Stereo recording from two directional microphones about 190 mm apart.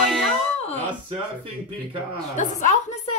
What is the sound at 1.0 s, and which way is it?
Speech, 25° right (ahead or behind).